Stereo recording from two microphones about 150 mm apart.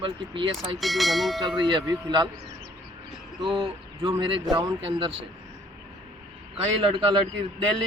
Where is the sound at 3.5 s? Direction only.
35° right (ahead or behind).